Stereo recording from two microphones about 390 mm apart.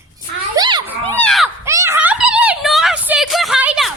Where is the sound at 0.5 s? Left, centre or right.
Centre.